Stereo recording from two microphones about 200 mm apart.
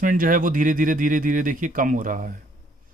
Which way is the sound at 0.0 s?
45° right (ahead or behind).